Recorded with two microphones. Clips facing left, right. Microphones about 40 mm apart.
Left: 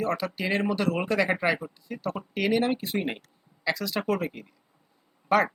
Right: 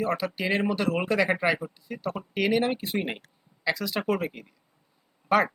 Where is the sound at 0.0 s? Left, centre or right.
Centre.